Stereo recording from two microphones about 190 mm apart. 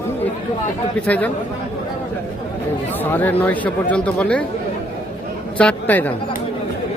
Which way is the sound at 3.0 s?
10° left (ahead or behind).